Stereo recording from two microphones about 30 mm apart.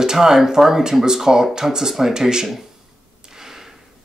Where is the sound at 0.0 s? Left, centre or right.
Centre.